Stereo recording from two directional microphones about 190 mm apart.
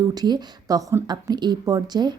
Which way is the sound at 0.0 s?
20° right (ahead or behind).